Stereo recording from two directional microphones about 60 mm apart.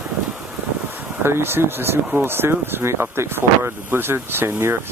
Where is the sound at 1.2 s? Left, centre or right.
Right.